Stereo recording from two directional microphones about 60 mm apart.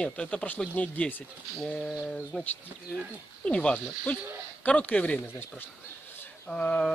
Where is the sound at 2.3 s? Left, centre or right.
Centre.